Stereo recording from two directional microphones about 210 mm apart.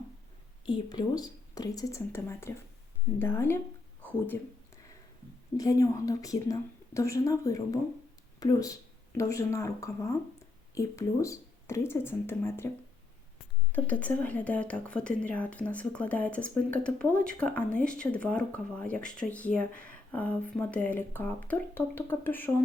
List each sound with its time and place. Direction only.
0.6 s a woman's voice: 20° left (ahead or behind)
5.5 s a woman's voice: 15° left (ahead or behind)
13.7 s a woman's voice: 5° left (ahead or behind)